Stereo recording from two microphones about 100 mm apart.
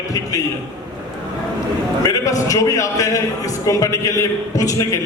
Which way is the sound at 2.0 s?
35° left (ahead or behind).